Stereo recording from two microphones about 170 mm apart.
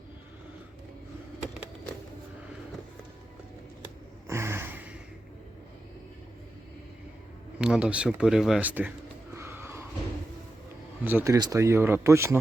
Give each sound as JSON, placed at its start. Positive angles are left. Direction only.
{"t": 4.3, "sound": "vehicle", "side_deg": -15}
{"t": 7.6, "sound": "speech", "side_deg": -5}
{"t": 9.3, "sound": "a sound", "side_deg": -15}
{"t": 11.0, "sound": "speech", "side_deg": -15}